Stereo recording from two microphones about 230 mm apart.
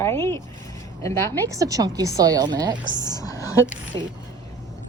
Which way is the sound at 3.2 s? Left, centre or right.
Centre.